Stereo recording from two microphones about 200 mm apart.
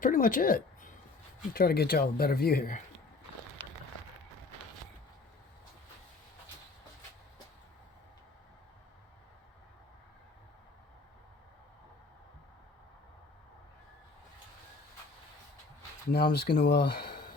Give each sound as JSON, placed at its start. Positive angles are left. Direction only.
{"t": 0.0, "sound": "a woman's voice", "side_deg": 45}
{"t": 16.0, "sound": "speech", "side_deg": 50}